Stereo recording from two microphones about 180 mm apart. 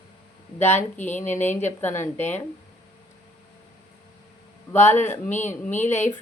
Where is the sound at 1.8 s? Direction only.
10° left (ahead or behind).